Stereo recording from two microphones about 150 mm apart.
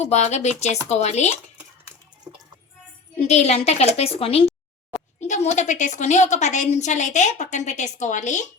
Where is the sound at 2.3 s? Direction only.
30° right (ahead or behind).